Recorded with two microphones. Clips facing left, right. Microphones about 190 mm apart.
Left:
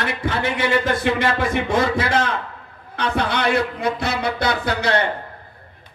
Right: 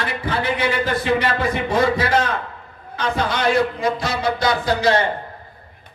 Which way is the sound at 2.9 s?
60° left (ahead or behind).